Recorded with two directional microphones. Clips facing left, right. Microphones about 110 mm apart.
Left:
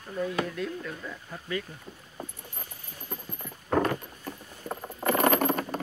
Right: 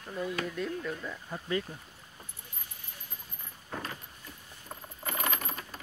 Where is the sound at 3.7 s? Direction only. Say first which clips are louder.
Left 14 dB; 75° left (ahead or behind).